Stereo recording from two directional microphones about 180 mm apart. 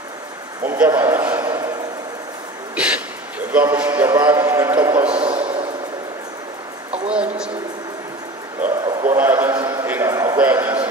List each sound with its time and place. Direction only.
0.7 s a man's voice: 10° right (ahead or behind)
2.7 s a sound: 5° right (ahead or behind)
3.5 s a man's voice: 10° right (ahead or behind)
5.1 s a sound: 30° right (ahead or behind)
7.1 s a woman's voice: 5° right (ahead or behind)
8.6 s a man's voice: 5° right (ahead or behind)